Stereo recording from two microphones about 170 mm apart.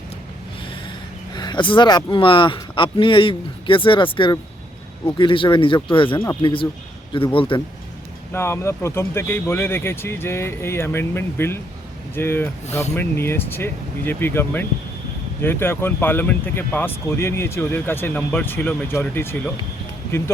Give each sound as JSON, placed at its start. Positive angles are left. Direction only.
{"t": 1.3, "sound": "speech", "side_deg": 25}
{"t": 8.3, "sound": "speech", "side_deg": 15}